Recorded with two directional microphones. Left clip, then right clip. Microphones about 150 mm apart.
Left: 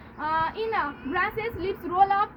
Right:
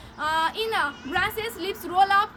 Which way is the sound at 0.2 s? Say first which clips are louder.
Right 2 dB; 40° right (ahead or behind).